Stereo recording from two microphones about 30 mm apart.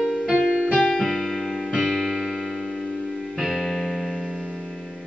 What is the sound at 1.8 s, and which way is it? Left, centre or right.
Music, centre.